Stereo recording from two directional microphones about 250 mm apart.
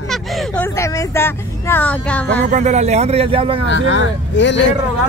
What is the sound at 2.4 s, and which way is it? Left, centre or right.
Speech, right.